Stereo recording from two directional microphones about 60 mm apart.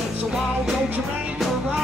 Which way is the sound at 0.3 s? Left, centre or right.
Centre.